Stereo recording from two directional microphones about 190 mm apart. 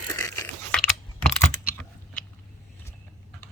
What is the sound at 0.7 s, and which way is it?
Computer keyboard, 5° left (ahead or behind).